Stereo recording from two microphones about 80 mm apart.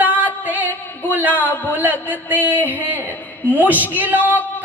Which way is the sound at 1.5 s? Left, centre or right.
Left.